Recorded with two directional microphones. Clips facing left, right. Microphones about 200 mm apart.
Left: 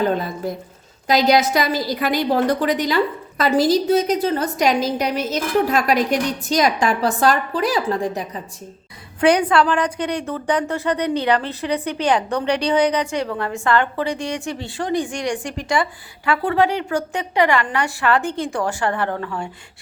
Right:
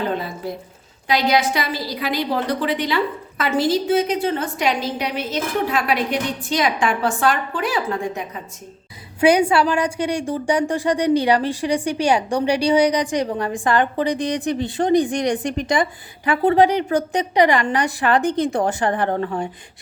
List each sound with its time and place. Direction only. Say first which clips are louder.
1.0 s a woman's voice: left 3 dB; 40° left (ahead or behind)
9.2 s a woman's voice: even; 10° right (ahead or behind)
19.1 s speech: right 4 dB; 35° right (ahead or behind)